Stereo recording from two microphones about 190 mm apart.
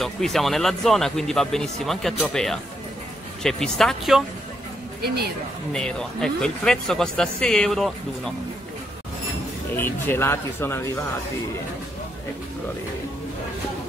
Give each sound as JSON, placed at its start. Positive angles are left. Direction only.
{"t": 0.0, "sound": "a man's voice", "side_deg": 0}
{"t": 5.0, "sound": "speech", "side_deg": -55}
{"t": 5.7, "sound": "a man's voice", "side_deg": 5}
{"t": 9.8, "sound": "speech", "side_deg": 10}